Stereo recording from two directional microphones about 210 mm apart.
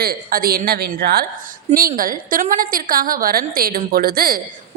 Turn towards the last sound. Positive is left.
turn(degrees=-45)  # may be behind; listen again after turning